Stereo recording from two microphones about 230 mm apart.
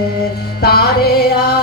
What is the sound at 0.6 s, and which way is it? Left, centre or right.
Music, left.